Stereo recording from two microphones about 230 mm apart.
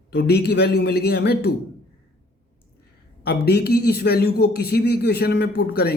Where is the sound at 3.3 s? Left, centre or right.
Left.